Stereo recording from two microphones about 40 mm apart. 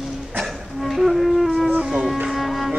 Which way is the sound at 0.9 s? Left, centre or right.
Centre.